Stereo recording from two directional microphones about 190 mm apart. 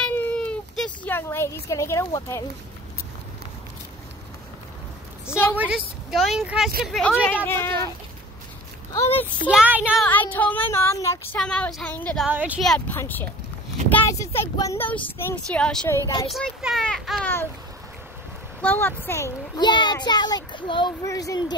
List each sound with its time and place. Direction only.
0.0 s a sound: 10° left (ahead or behind)
5.6 s speech: 5° right (ahead or behind); by 7.7 s 10° left (ahead or behind)
9.1 s speech: 10° left (ahead or behind)
9.5 s speech: 5° right (ahead or behind)
10.0 s speech: 10° left (ahead or behind)
12.3 s speech: 10° right (ahead or behind)
18.6 s a child's voice: 10° left (ahead or behind)